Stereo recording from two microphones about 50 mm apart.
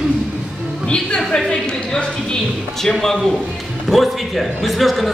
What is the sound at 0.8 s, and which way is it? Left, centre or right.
A woman's voice, centre.